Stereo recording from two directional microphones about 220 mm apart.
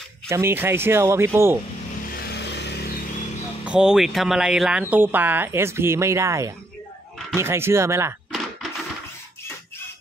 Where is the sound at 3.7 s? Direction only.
5° right (ahead or behind).